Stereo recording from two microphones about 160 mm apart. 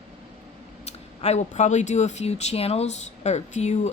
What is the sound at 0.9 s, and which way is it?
Speech, 40° left (ahead or behind).